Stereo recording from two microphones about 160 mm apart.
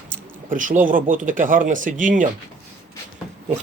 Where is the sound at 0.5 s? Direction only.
55° right (ahead or behind).